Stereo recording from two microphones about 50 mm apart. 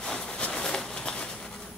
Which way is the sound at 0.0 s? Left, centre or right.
Centre.